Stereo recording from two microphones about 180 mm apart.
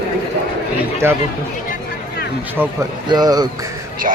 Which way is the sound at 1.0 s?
15° right (ahead or behind).